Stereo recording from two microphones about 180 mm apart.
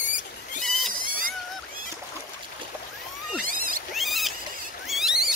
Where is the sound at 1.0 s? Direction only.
50° right (ahead or behind).